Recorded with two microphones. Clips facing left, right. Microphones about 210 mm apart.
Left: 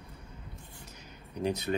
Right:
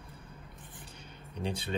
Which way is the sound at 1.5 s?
30° right (ahead or behind).